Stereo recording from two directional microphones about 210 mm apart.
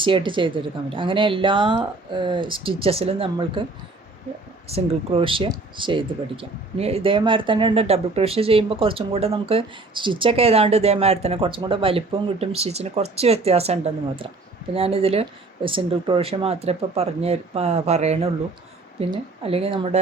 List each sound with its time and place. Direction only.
0.0 s speech: 25° right (ahead or behind)
4.7 s speech: 25° right (ahead or behind)
14.8 s speech: 30° right (ahead or behind)